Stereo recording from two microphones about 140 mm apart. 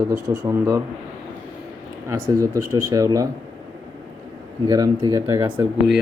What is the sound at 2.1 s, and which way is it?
Speech, 25° right (ahead or behind).